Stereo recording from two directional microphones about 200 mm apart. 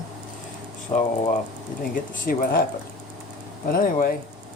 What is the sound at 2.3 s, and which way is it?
Speech, 45° left (ahead or behind).